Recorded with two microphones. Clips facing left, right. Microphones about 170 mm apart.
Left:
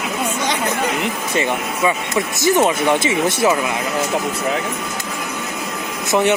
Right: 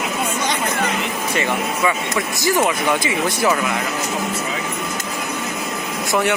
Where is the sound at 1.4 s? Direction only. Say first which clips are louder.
Left 1 dB; 20° left (ahead or behind).